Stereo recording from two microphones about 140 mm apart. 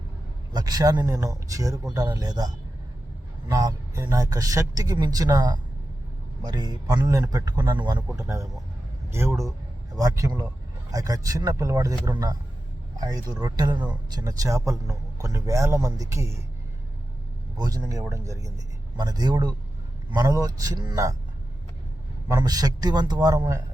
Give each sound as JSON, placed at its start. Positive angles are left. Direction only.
{"t": 0.5, "sound": "speech", "side_deg": -30}
{"t": 8.1, "sound": "speech", "side_deg": -20}
{"t": 17.6, "sound": "a man's voice", "side_deg": -25}
{"t": 22.3, "sound": "speech", "side_deg": -25}